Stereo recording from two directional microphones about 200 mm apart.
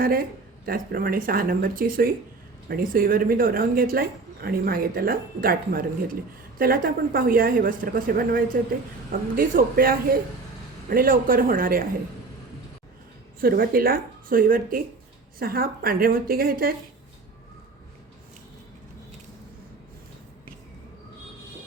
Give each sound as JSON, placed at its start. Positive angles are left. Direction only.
{"t": 0.0, "sound": "a woman's voice", "side_deg": -45}
{"t": 13.4, "sound": "a woman's voice", "side_deg": -50}